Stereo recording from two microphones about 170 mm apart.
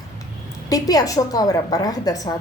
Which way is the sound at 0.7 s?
20° left (ahead or behind).